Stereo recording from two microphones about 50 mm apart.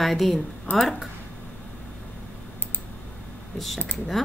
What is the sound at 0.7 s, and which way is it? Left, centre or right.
Speech, left.